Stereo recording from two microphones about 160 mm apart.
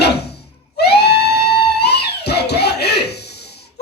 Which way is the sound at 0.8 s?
90° left.